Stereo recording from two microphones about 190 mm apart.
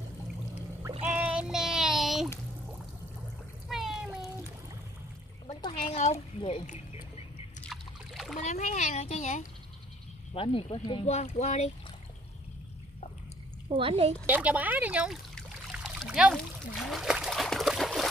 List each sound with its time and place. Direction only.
1.0 s child singing: 10° right (ahead or behind)
3.6 s water: centre (ahead or behind)
5.5 s a sound: 30° left (ahead or behind)
6.4 s speech: 35° left (ahead or behind)
7.7 s a sound: centre (ahead or behind)
8.4 s speech: 40° left (ahead or behind)
13.7 s a woman's voice: 30° right (ahead or behind)
14.2 s speech: 10° right (ahead or behind)
15.3 s trickle: centre (ahead or behind)